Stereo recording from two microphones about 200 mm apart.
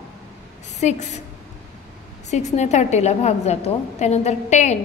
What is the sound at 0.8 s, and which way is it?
Speech, 35° left (ahead or behind).